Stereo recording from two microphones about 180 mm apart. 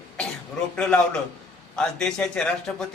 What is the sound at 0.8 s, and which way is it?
A man's voice, 5° left (ahead or behind).